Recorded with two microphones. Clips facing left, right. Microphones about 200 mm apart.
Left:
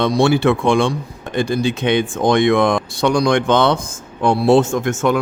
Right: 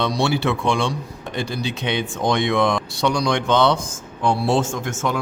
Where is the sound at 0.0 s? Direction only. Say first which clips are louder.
Left 6 dB; 50° left (ahead or behind).